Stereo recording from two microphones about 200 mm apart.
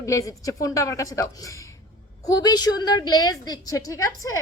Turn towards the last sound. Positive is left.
turn(degrees=15)  # may be behind; listen again after turning